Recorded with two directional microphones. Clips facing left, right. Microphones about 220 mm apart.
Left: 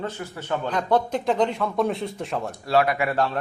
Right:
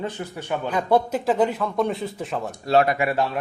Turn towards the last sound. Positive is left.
turn(degrees=-10)  # may be behind; listen again after turning